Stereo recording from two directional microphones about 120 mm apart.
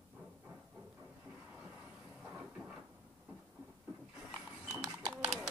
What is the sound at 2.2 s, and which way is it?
Vehicle, 10° right (ahead or behind).